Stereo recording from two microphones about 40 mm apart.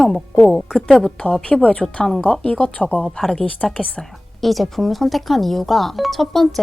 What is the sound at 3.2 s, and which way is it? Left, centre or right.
A woman's voice, centre.